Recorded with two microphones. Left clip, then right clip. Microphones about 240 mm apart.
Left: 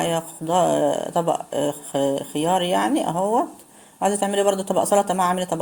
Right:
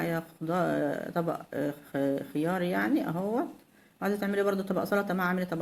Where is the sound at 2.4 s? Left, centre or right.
Left.